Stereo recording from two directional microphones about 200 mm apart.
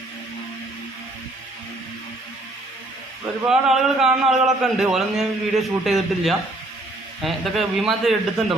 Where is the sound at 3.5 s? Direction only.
Centre (ahead or behind).